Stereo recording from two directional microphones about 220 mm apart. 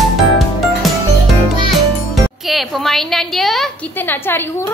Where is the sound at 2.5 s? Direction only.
Centre (ahead or behind).